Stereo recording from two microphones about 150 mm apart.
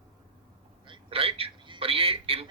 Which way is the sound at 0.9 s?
40° right (ahead or behind).